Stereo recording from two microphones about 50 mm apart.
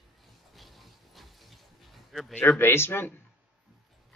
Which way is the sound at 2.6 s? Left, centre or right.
Left.